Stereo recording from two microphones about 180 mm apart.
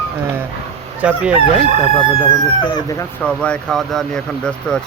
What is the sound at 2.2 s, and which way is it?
Speech, 25° left (ahead or behind).